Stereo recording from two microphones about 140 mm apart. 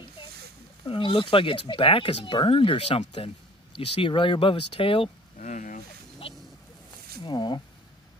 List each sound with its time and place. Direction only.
0.8 s speech: 40° left (ahead or behind)
5.4 s a sound: 60° left (ahead or behind)
7.2 s speech: 30° left (ahead or behind)